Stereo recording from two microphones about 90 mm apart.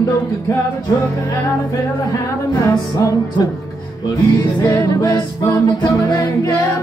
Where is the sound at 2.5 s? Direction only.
45° left (ahead or behind).